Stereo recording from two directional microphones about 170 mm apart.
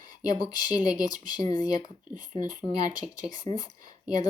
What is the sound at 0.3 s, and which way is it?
Speech, 25° left (ahead or behind).